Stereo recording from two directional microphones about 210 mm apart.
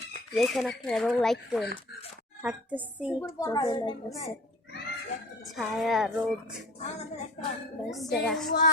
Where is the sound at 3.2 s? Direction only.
15° left (ahead or behind).